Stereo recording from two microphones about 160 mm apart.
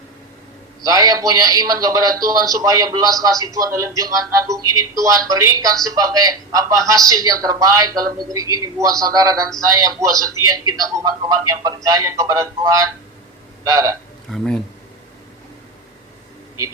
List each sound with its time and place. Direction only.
0.8 s a man's voice: 20° right (ahead or behind)
14.3 s speech: centre (ahead or behind)